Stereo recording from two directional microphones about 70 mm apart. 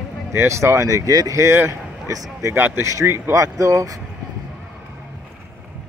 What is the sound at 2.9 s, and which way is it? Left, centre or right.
Speech, right.